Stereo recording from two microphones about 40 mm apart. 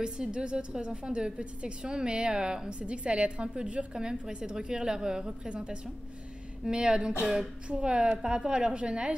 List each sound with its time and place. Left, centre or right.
0.0 s a woman's voice: right